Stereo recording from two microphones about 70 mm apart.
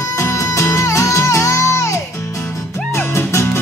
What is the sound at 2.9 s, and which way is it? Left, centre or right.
Music, left.